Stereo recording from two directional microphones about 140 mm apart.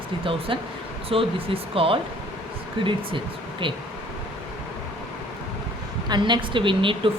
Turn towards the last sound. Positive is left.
turn(degrees=-40)  # may be behind; listen again after turning